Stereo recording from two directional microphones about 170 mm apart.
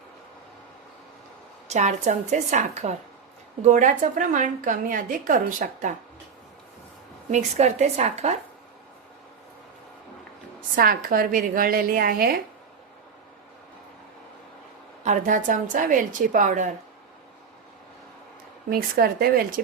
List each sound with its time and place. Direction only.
1.6 s a woman's voice: 45° right (ahead or behind)
7.3 s a woman's voice: 40° right (ahead or behind)
10.8 s a woman's voice: 55° right (ahead or behind)
15.0 s a woman's voice: 50° right (ahead or behind)
18.7 s a woman's voice: 65° right (ahead or behind)